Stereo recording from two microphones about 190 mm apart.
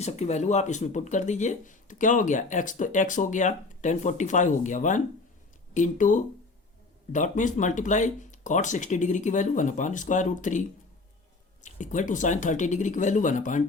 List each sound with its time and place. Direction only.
0.0 s speech: 35° left (ahead or behind)